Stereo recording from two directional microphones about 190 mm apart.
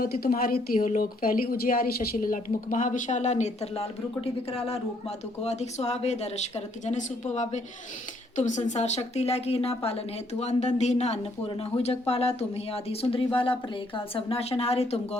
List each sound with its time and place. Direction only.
0.0 s speech: 50° left (ahead or behind); by 15.2 s 35° left (ahead or behind)